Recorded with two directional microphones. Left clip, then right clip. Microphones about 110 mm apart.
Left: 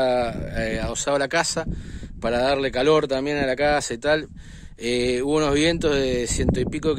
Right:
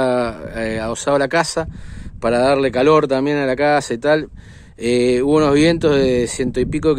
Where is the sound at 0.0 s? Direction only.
20° left (ahead or behind).